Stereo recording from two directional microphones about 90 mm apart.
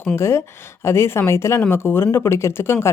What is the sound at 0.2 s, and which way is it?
Speech, 30° left (ahead or behind).